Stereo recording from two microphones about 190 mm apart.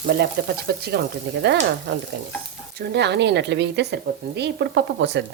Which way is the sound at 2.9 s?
65° right (ahead or behind).